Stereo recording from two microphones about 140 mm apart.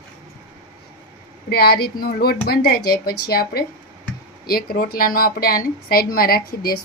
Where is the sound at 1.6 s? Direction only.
90° left.